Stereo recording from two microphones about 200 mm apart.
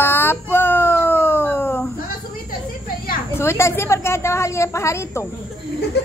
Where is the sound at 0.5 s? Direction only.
10° left (ahead or behind).